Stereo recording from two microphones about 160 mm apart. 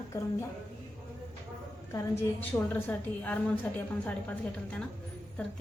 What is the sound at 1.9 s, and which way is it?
A woman's voice, 15° left (ahead or behind).